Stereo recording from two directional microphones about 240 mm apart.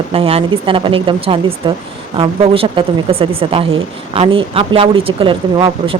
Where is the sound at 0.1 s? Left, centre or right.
Right.